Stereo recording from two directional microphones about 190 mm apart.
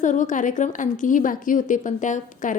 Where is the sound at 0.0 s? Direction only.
40° left (ahead or behind).